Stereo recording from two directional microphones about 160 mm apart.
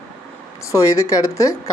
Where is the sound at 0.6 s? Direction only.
20° left (ahead or behind).